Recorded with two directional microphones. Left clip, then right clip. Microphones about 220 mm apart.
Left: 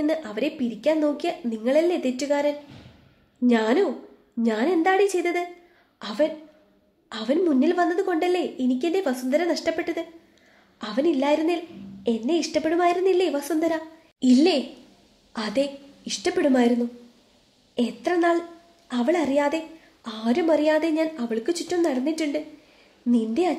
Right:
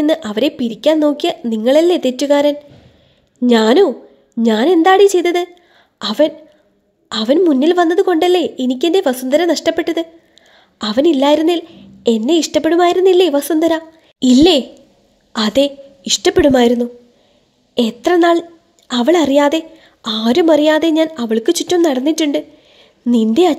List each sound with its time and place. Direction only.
0.0 s a woman's voice: 40° right (ahead or behind)